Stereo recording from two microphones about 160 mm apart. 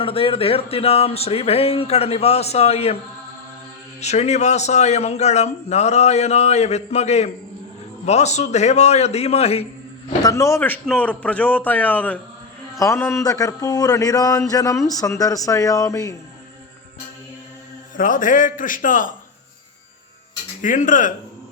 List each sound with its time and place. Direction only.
0.0 s speech: 35° left (ahead or behind)
4.0 s a man's voice: 45° left (ahead or behind)
10.2 s a man's voice: 20° left (ahead or behind)
17.9 s a man's voice: 55° left (ahead or behind)
20.6 s a man's voice: 55° left (ahead or behind)